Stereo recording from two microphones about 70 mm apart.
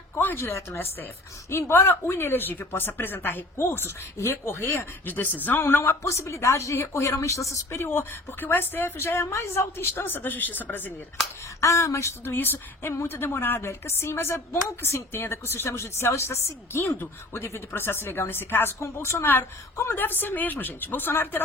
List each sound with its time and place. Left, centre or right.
0.2 s speech: left
0.4 s a woman's voice: left
5.6 s a woman's voice: left
11.6 s a woman's voice: left
12.2 s a woman's voice: left